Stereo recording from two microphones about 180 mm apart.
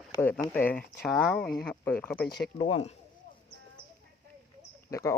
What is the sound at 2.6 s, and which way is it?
Speech, 30° left (ahead or behind).